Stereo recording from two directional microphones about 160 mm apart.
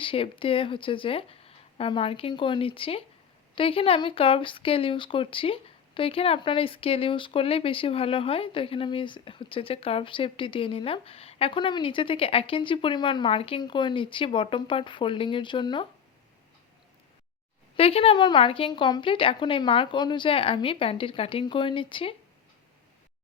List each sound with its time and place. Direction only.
0.0 s speech: 35° left (ahead or behind)
17.7 s speech: 35° left (ahead or behind)